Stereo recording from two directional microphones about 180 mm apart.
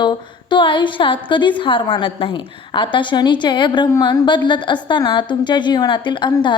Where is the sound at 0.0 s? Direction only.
25° left (ahead or behind).